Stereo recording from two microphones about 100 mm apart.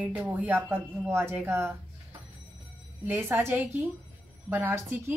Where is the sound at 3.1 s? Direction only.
20° right (ahead or behind).